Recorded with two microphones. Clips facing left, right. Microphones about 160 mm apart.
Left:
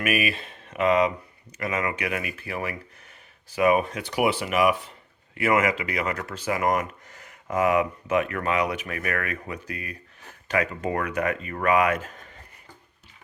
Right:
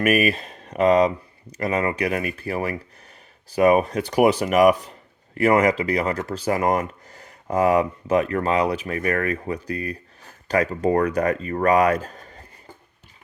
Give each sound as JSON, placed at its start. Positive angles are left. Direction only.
{"t": 0.0, "sound": "speech", "side_deg": -40}